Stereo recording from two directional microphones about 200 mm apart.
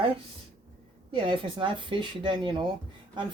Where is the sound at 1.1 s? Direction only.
25° right (ahead or behind).